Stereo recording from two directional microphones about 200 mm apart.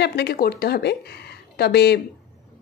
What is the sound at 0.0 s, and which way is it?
A woman's voice, 55° left (ahead or behind).